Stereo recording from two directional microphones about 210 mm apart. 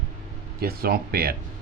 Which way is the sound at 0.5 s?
45° right (ahead or behind).